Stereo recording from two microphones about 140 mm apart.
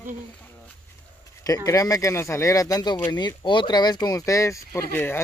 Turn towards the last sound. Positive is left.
turn(degrees=15)  # may be behind; listen again after turning